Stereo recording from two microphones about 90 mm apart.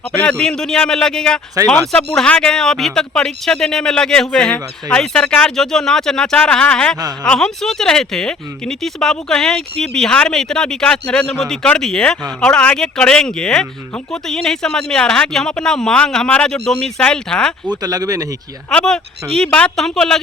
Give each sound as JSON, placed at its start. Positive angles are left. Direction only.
{"t": 0.2, "sound": "speech", "side_deg": 10}
{"t": 17.8, "sound": "speech", "side_deg": -45}
{"t": 18.7, "sound": "speech", "side_deg": 10}